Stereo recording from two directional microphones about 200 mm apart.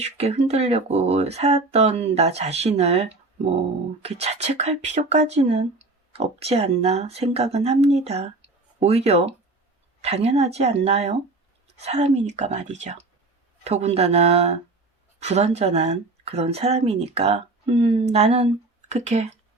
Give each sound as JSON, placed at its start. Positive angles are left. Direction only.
{"t": 0.0, "sound": "speech", "side_deg": -30}